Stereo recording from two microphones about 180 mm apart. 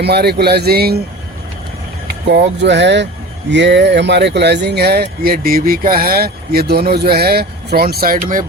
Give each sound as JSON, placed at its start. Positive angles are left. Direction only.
{"t": 0.0, "sound": "speech", "side_deg": -65}
{"t": 2.3, "sound": "speech", "side_deg": -75}